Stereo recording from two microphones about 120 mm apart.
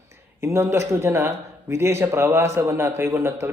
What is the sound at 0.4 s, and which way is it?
A man's voice, 20° right (ahead or behind).